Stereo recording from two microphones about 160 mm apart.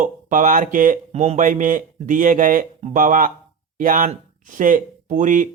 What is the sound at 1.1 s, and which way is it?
Speech, 45° right (ahead or behind).